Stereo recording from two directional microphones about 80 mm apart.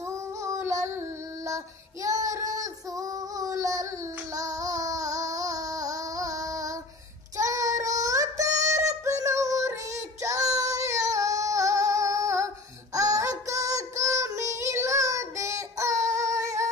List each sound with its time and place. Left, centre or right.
0.0 s female singing: right
7.3 s music: right